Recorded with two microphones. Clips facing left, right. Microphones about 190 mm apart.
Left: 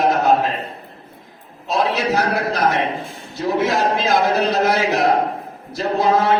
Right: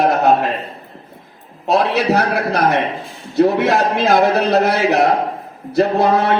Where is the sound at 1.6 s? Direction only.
60° right (ahead or behind).